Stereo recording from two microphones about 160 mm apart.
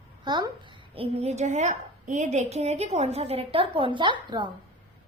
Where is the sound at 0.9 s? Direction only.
40° right (ahead or behind).